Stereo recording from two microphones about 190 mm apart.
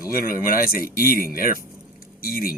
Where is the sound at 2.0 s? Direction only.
50° left (ahead or behind).